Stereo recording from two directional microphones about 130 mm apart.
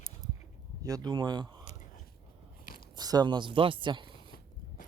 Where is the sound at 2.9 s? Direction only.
30° right (ahead or behind).